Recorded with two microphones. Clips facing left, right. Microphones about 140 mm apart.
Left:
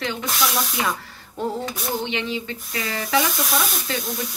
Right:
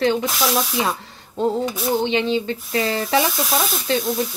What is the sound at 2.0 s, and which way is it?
Speech, 30° right (ahead or behind).